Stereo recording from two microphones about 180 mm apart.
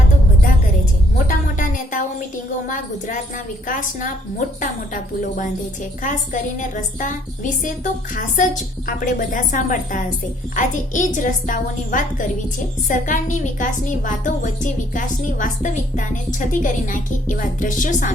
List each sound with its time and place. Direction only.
1.3 s music: 45° left (ahead or behind)
2.6 s a woman's voice: 45° left (ahead or behind)